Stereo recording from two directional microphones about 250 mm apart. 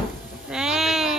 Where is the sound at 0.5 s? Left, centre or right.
Centre.